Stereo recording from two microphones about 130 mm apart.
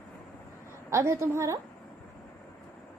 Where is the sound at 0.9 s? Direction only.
20° right (ahead or behind).